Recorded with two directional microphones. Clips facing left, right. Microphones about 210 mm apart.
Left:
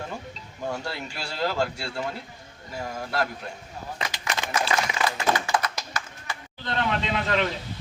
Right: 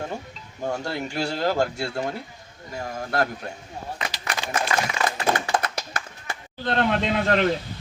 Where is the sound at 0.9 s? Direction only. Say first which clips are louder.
Right 7 dB; 45° right (ahead or behind).